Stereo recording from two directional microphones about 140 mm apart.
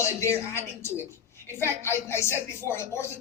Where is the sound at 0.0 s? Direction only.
20° left (ahead or behind).